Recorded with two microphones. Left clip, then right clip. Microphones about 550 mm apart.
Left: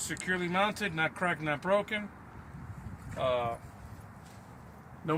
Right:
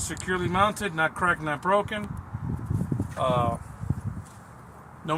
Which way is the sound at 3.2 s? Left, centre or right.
Left.